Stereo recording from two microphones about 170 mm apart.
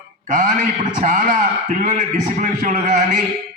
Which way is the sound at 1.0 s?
50° right (ahead or behind).